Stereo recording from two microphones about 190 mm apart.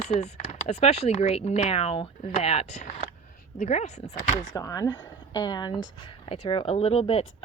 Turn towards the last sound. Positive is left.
turn(degrees=30)  # may be behind; listen again after turning